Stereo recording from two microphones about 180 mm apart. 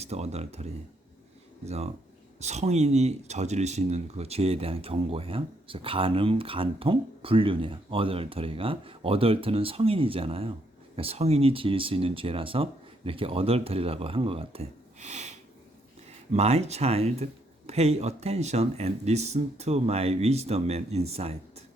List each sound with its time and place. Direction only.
0.0 s speech: 35° right (ahead or behind)